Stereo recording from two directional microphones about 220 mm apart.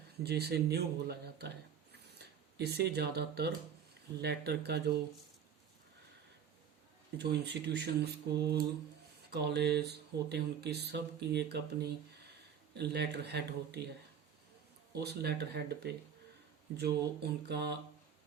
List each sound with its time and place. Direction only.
0.2 s speech: 45° right (ahead or behind)
7.2 s speech: 50° right (ahead or behind)
14.9 s speech: 45° right (ahead or behind)
17.5 s speech: 50° right (ahead or behind)